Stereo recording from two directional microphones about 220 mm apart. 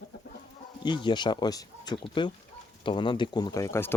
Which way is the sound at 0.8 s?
20° left (ahead or behind).